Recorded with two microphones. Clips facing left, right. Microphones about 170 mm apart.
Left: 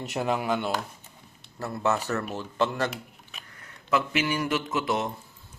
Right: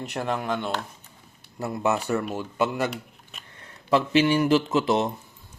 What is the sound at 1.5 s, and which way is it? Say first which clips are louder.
Speech: right 2 dB; 15° right (ahead or behind).